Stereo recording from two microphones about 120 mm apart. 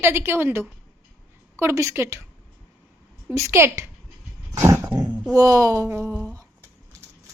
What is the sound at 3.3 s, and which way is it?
A woman's voice, 25° right (ahead or behind).